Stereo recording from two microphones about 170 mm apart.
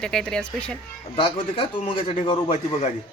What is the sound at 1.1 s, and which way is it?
Speech, 30° left (ahead or behind).